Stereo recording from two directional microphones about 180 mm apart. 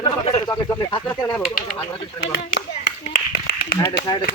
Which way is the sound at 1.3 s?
5° left (ahead or behind).